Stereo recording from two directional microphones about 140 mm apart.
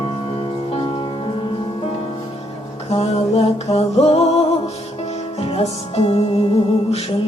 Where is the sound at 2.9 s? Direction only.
45° left (ahead or behind).